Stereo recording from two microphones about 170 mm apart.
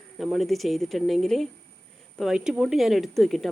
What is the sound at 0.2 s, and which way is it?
Speech, centre (ahead or behind).